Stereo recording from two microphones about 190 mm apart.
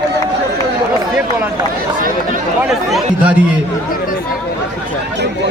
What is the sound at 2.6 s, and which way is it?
Speech, centre (ahead or behind).